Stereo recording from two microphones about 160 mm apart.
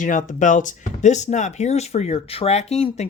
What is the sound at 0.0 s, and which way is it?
Speech, 55° left (ahead or behind).